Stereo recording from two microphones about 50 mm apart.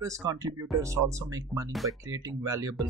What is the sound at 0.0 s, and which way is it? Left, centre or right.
Speech, right.